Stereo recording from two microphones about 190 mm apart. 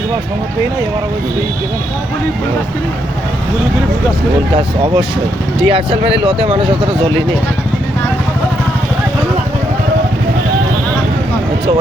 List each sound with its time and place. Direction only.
4.5 s speech: 30° right (ahead or behind)